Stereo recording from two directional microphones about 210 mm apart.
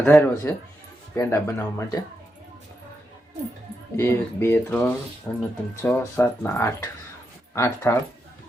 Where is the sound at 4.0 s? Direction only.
10° left (ahead or behind).